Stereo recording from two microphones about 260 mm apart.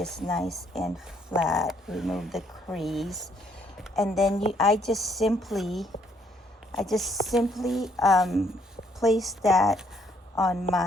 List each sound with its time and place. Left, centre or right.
0.0 s speech: centre